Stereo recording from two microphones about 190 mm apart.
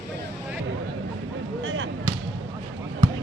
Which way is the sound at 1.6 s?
90° right.